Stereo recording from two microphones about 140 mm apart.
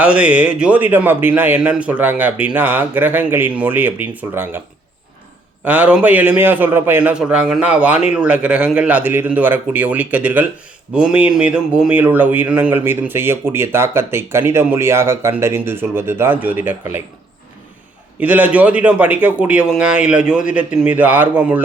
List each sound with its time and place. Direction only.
0.0 s speech: 10° right (ahead or behind)
5.6 s speech: 10° right (ahead or behind)
18.2 s speech: 10° right (ahead or behind)